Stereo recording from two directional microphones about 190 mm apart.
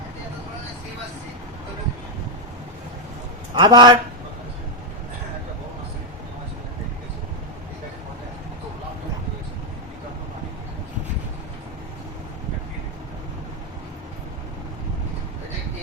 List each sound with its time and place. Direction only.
3.5 s a man's voice: 25° right (ahead or behind)